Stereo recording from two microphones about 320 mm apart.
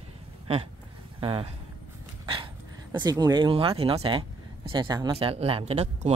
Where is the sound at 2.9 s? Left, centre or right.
Centre.